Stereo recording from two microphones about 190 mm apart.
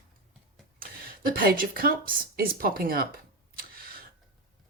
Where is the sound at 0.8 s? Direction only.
50° right (ahead or behind).